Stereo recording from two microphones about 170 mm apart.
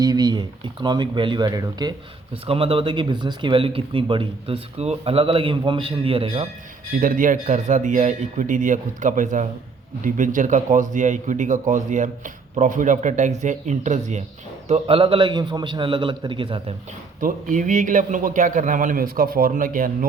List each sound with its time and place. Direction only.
0.0 s a man's voice: 25° right (ahead or behind)
7.0 s a man's voice: 50° right (ahead or behind); by 16.7 s 30° right (ahead or behind)
17.2 s a man's voice: 50° right (ahead or behind)